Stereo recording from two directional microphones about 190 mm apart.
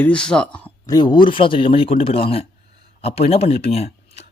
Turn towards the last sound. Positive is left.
turn(degrees=30)  # may be behind; listen again after turning